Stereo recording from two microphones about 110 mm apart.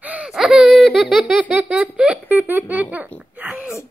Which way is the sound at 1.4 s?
15° right (ahead or behind).